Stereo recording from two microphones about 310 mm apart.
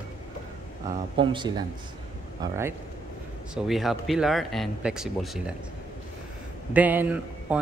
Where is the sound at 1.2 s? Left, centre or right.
Centre.